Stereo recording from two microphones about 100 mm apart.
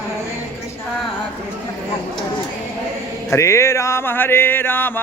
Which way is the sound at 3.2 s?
30° left (ahead or behind).